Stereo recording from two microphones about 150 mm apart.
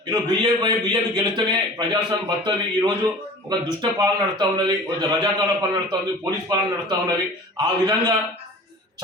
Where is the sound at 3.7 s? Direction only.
25° right (ahead or behind).